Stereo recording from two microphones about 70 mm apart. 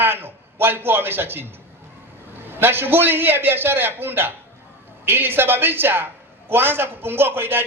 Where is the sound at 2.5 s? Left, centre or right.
Right.